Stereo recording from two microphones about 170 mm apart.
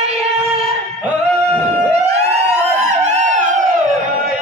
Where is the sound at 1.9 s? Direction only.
40° right (ahead or behind).